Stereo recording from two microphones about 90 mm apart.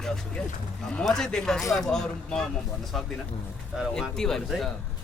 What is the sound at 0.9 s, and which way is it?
Speech, 5° left (ahead or behind).